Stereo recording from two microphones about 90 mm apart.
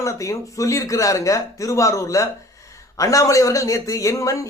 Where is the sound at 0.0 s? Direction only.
35° left (ahead or behind).